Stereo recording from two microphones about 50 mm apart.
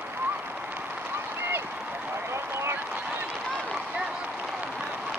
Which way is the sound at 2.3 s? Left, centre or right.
Right.